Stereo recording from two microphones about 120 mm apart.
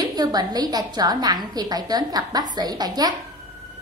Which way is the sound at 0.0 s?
35° right (ahead or behind).